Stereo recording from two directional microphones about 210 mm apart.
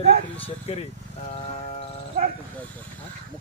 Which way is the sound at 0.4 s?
30° left (ahead or behind).